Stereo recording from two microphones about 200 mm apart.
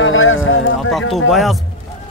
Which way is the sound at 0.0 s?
85° left.